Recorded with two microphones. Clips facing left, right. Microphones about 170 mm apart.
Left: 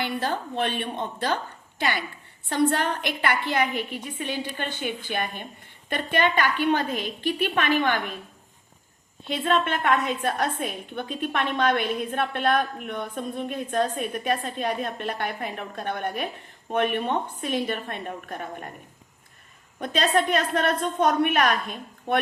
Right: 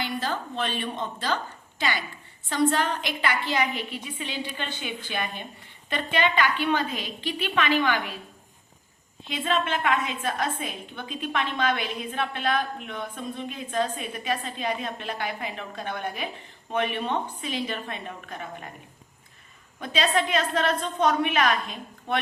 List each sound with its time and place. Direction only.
0.0 s a woman's voice: 60° left (ahead or behind)
9.2 s a woman's voice: 55° left (ahead or behind)
19.8 s a woman's voice: 50° left (ahead or behind)